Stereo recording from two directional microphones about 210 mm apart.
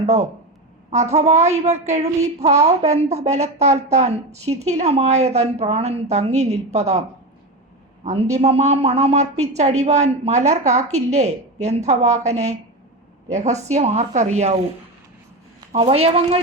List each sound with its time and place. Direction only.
0.0 s a woman's voice: 30° right (ahead or behind)
8.0 s a man's voice: 30° right (ahead or behind)
15.7 s a man's voice: 30° right (ahead or behind)